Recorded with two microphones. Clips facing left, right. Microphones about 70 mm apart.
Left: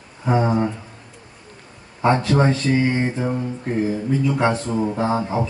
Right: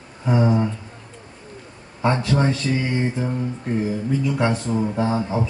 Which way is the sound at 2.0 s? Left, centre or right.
Left.